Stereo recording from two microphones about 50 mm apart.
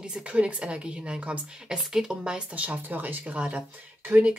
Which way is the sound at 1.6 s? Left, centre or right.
Centre.